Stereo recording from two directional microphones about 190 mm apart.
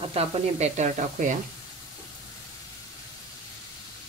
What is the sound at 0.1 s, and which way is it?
Speech, 35° right (ahead or behind).